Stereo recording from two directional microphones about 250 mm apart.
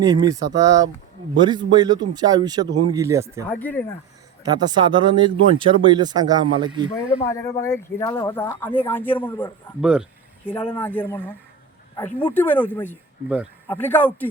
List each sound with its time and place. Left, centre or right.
0.0 s speech: centre
3.5 s speech: centre
4.4 s speech: centre
7.3 s speech: centre
9.8 s a sound: centre
10.5 s speech: centre
13.2 s speech: centre
13.7 s speech: centre